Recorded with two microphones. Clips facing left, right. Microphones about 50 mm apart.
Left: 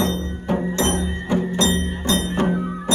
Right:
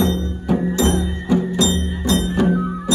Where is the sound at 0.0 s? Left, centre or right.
Left.